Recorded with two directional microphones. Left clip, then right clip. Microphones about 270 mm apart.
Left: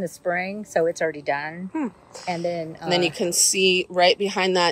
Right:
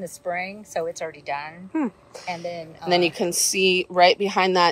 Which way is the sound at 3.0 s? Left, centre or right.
Centre.